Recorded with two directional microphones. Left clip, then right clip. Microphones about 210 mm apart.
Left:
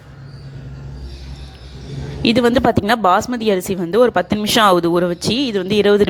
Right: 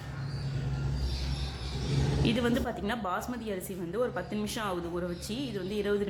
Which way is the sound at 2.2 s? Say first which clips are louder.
Left 17 dB; 35° left (ahead or behind).